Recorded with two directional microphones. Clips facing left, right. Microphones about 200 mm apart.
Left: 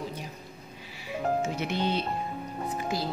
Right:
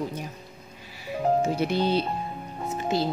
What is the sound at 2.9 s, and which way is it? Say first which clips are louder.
Speech: right 7 dB; 25° right (ahead or behind).